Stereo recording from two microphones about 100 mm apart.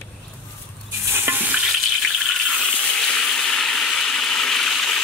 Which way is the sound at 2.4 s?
5° left (ahead or behind).